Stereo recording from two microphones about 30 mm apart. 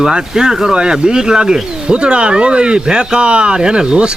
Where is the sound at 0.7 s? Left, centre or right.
Right.